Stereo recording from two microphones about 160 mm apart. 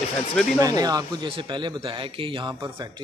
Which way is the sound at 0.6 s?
25° right (ahead or behind).